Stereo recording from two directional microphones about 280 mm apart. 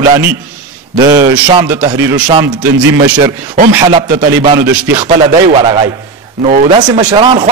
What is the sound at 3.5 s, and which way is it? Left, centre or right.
A man's voice, right.